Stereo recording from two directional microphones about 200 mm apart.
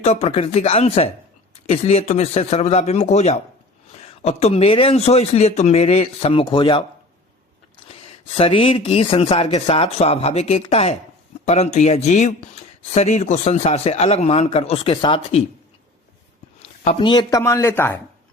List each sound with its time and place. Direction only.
0.0 s speech: 30° left (ahead or behind)
8.2 s speech: 25° left (ahead or behind)
16.6 s speech: 30° left (ahead or behind); by 18.0 s 10° left (ahead or behind)